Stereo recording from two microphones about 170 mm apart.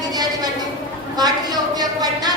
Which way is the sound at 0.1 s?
25° right (ahead or behind).